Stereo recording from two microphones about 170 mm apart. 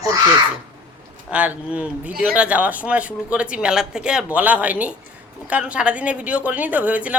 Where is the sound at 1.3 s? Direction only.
10° right (ahead or behind).